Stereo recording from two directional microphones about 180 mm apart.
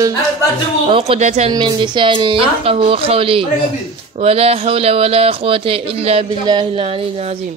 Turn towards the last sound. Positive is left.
turn(degrees=-30)  # may be behind; listen again after turning